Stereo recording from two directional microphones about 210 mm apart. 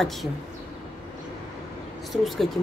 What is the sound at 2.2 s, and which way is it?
Speech, centre (ahead or behind).